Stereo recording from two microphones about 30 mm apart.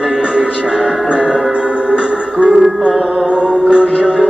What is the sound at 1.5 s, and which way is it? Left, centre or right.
Music, right.